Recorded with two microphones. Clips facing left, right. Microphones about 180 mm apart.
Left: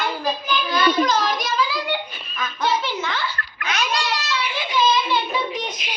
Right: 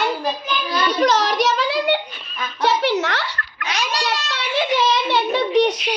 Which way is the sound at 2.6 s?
70° right (ahead or behind).